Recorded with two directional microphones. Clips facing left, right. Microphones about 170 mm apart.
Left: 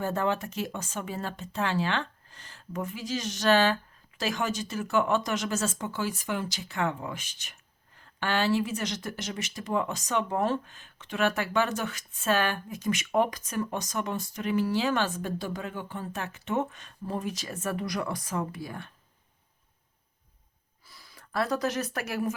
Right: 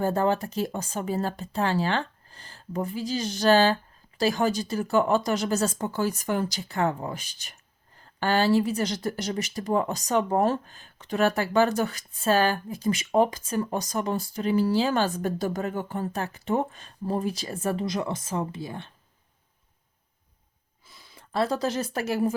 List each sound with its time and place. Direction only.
0.0 s speech: 35° right (ahead or behind)
20.8 s speech: 20° right (ahead or behind)